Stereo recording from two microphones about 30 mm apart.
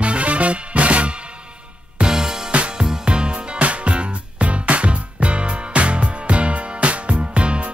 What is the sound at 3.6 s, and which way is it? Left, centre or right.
Music, right.